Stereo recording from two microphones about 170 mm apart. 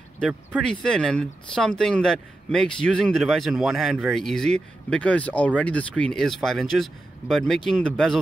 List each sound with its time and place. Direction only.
0.6 s speech: 5° left (ahead or behind)